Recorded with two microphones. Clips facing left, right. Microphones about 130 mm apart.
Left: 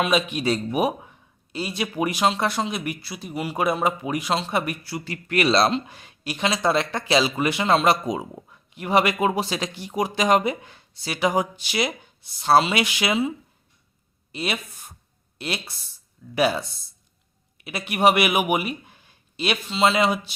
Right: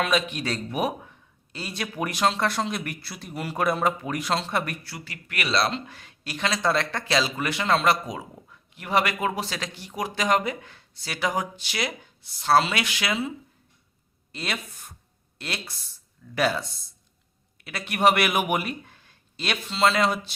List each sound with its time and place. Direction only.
0.0 s speech: 10° left (ahead or behind)
4.9 s speech: 25° left (ahead or behind)
14.3 s speech: 15° left (ahead or behind)